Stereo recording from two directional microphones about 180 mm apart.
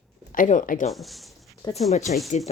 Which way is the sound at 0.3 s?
45° left (ahead or behind).